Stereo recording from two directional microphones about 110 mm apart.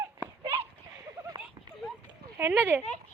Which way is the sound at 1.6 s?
35° right (ahead or behind).